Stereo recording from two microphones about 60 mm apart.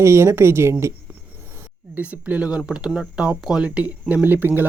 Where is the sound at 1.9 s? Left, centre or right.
Right; by 3.6 s centre.